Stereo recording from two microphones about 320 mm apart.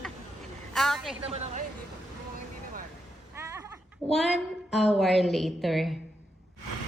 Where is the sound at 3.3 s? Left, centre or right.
Centre.